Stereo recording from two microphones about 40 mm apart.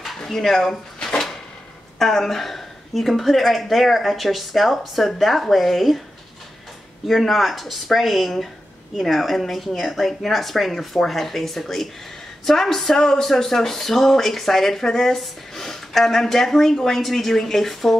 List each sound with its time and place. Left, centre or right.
0.0 s speech: centre
2.0 s a woman's voice: centre
7.1 s a woman's voice: centre